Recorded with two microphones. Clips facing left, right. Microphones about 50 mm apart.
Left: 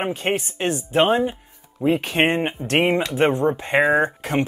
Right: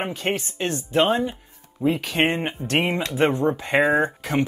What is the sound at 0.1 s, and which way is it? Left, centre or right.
Speech, left.